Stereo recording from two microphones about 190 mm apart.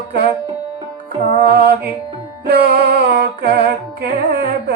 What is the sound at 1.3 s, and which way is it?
Music, 60° right (ahead or behind).